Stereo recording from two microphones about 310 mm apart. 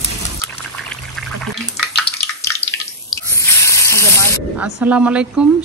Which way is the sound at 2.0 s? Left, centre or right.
Centre.